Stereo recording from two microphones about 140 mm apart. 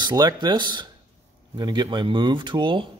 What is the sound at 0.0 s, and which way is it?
Speech, 30° right (ahead or behind).